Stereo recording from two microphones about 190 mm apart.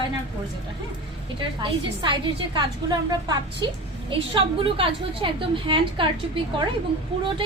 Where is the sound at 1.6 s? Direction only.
25° right (ahead or behind).